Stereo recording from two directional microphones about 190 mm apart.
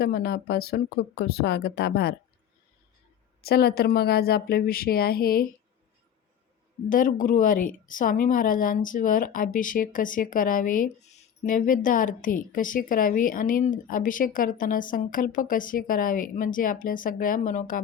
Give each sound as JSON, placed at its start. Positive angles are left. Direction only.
{"t": 0.0, "sound": "speech", "side_deg": 60}
{"t": 3.4, "sound": "a woman's voice", "side_deg": 55}
{"t": 6.9, "sound": "a woman's voice", "side_deg": 45}